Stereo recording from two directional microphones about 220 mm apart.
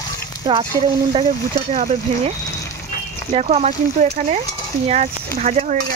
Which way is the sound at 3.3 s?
30° right (ahead or behind).